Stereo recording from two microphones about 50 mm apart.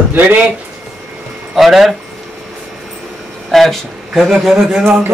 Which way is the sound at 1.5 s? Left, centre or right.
Centre.